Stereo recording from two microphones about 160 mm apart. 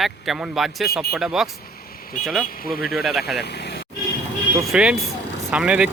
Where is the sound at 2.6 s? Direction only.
70° left (ahead or behind).